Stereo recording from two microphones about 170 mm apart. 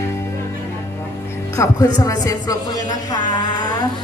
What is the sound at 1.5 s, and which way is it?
A woman's voice, 15° left (ahead or behind).